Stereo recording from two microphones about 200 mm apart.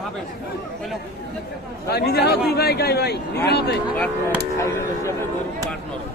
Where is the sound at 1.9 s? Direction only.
55° left (ahead or behind).